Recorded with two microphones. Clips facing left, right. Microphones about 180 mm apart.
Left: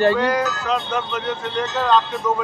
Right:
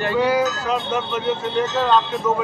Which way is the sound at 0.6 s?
5° right (ahead or behind).